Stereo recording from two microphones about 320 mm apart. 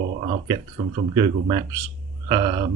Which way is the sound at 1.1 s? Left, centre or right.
Centre.